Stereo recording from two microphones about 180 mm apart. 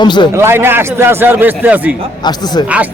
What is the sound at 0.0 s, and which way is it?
Speech, 25° left (ahead or behind).